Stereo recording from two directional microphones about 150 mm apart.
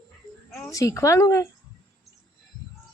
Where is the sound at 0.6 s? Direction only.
20° left (ahead or behind).